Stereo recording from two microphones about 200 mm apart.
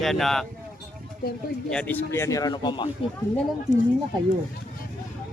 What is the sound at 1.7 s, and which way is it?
A man's voice, 5° left (ahead or behind).